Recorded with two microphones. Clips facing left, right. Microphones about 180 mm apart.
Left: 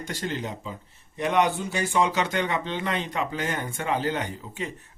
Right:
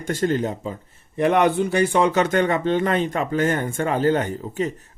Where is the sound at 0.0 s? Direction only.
50° right (ahead or behind).